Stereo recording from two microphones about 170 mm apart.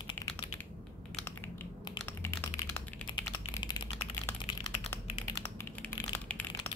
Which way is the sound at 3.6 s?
25° left (ahead or behind).